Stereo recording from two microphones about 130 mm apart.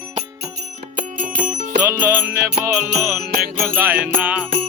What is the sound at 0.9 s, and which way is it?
Music, 90° right.